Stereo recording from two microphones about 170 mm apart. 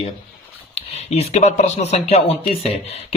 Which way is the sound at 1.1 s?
40° left (ahead or behind).